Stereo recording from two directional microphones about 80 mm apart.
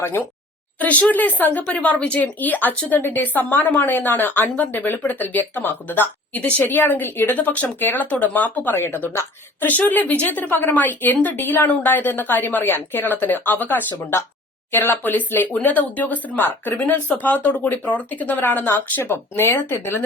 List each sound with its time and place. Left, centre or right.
0.0 s speech: left